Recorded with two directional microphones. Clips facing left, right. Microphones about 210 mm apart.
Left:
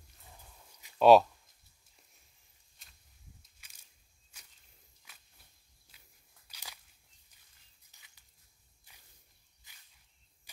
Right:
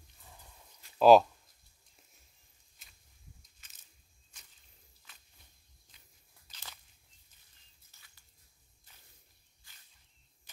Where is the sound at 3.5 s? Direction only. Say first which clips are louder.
Even; 10° left (ahead or behind).